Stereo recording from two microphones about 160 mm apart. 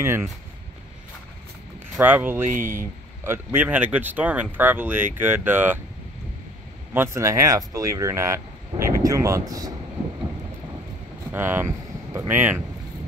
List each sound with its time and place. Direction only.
2.0 s speech: 10° right (ahead or behind)
2.5 s speech: 55° right (ahead or behind)
3.3 s speech: 10° right (ahead or behind)
6.9 s speech: 15° right (ahead or behind)
11.3 s speech: 15° right (ahead or behind)